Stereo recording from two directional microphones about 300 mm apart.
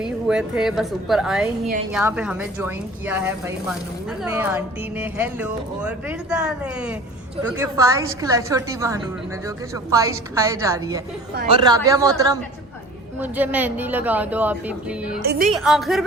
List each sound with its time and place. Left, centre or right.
0.0 s a woman's voice: centre
15.2 s a woman's voice: right
15.5 s speech: centre